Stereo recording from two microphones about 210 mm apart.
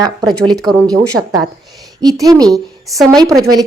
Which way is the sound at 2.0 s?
15° right (ahead or behind).